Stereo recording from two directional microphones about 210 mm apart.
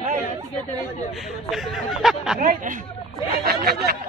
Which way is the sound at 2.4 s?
40° right (ahead or behind).